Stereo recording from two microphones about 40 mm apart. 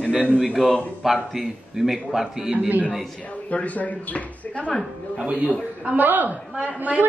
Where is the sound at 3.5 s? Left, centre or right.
Left.